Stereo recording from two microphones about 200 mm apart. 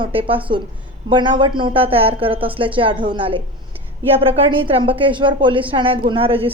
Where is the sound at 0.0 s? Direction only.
25° right (ahead or behind).